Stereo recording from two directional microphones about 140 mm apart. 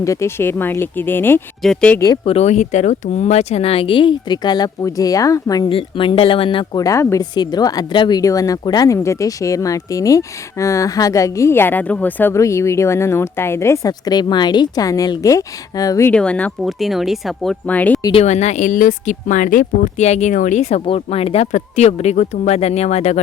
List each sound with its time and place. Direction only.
0.0 s speech: 20° left (ahead or behind); by 2.0 s 5° left (ahead or behind)
2.2 s speech: 50° left (ahead or behind); by 5.7 s 25° left (ahead or behind)
5.7 s speech: 40° left (ahead or behind)
6.7 s speech: 25° left (ahead or behind)
16.1 s speech: 10° left (ahead or behind)
18.2 s speech: 55° left (ahead or behind)